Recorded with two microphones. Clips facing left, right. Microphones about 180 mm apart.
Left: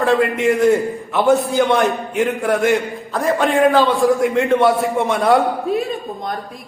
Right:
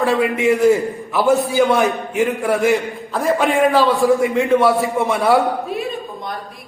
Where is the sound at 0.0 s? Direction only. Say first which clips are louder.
Left 1 dB; centre (ahead or behind).